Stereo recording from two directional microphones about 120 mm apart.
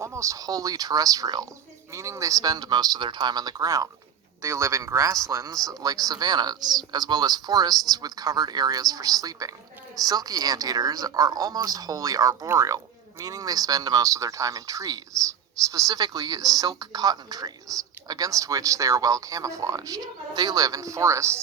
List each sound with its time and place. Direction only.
0.0 s a man's voice: 25° right (ahead or behind)